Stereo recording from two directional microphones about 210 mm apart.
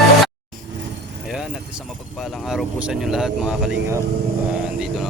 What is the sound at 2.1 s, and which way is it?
Speech, centre (ahead or behind).